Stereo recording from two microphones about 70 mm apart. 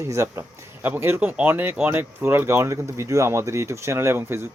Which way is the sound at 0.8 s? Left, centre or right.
Right.